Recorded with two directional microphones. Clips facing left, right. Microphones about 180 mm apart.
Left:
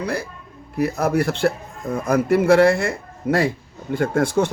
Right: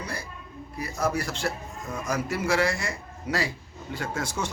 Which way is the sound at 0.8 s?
60° left (ahead or behind).